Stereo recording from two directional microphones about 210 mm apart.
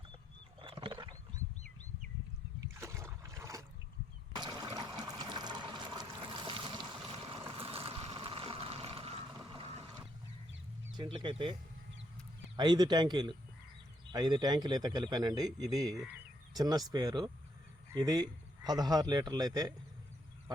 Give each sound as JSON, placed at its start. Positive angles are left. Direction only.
{"t": 0.6, "sound": "wild animals", "side_deg": -25}
{"t": 2.7, "sound": "boat", "side_deg": -15}
{"t": 4.4, "sound": "water", "side_deg": -20}
{"t": 10.9, "sound": "a man's voice", "side_deg": -20}
{"t": 12.5, "sound": "a man's voice", "side_deg": -20}